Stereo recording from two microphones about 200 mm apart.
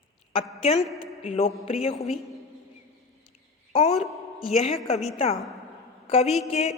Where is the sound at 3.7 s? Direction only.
30° left (ahead or behind).